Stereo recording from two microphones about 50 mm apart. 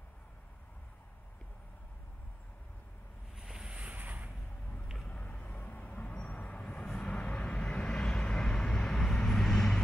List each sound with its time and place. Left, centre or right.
3.3 s ocean: centre
3.7 s boat: right
5.0 s vehicle: left; by 9.8 s centre